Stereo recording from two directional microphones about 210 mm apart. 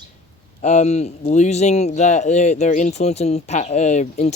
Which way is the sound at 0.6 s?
35° left (ahead or behind).